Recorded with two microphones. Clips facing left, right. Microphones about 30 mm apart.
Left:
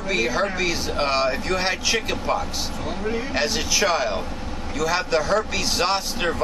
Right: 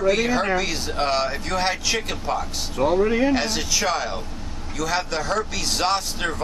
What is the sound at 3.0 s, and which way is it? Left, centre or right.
Speech, right.